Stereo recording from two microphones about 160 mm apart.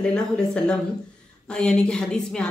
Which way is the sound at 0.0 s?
5° left (ahead or behind).